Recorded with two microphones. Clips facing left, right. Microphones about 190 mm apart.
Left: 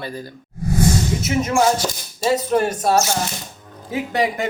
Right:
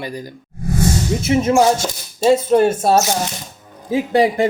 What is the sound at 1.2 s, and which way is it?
Speech, 25° right (ahead or behind).